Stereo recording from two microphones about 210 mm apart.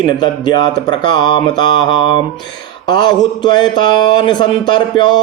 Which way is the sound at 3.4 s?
20° left (ahead or behind).